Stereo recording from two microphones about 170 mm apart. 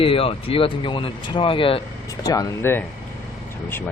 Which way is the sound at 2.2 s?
20° left (ahead or behind).